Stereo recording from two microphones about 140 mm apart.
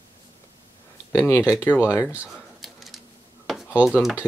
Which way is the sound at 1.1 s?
15° left (ahead or behind).